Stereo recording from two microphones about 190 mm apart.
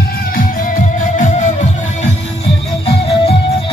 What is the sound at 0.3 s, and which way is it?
Music, 45° left (ahead or behind).